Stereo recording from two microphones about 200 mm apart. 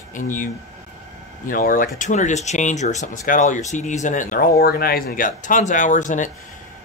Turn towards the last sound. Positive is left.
turn(degrees=40)  # may be behind; listen again after turning